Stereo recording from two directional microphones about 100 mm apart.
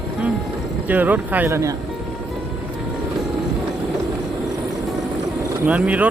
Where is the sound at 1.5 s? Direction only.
30° right (ahead or behind).